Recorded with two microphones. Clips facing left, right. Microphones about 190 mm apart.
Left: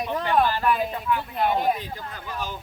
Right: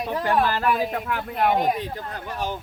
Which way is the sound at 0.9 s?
65° right (ahead or behind).